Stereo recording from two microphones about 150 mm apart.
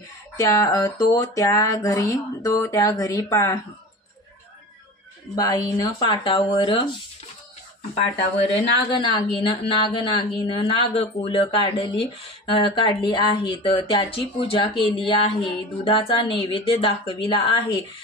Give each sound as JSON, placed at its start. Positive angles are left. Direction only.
{"t": 0.4, "sound": "speech", "side_deg": 20}
{"t": 5.3, "sound": "speech", "side_deg": 25}
{"t": 8.5, "sound": "speech", "side_deg": 35}